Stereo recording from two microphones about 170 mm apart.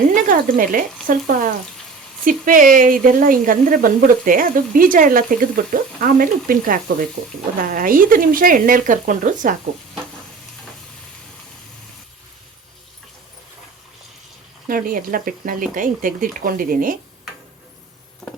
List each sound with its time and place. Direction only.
0.1 s speech: 50° right (ahead or behind)
14.7 s speech: 55° right (ahead or behind)
18.2 s a sound: 5° left (ahead or behind)